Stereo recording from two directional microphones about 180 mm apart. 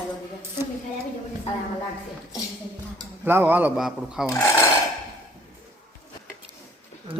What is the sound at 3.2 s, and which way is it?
Speech, 10° right (ahead or behind).